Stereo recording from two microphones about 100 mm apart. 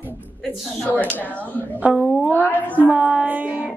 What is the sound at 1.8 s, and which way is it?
Speech, 10° right (ahead or behind).